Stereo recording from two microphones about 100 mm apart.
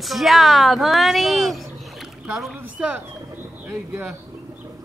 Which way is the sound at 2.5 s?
15° right (ahead or behind).